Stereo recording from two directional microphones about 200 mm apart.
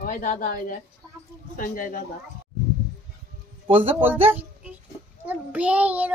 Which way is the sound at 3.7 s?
25° right (ahead or behind).